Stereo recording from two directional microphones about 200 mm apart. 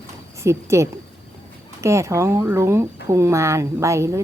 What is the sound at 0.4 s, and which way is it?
Speech, 15° right (ahead or behind).